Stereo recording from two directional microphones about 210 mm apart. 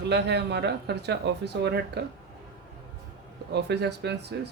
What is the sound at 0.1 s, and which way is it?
Speech, 55° right (ahead or behind).